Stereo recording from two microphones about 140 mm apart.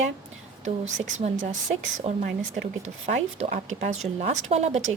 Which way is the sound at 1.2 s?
65° right (ahead or behind).